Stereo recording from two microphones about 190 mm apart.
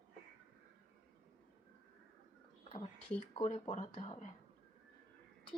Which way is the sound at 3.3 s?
35° left (ahead or behind).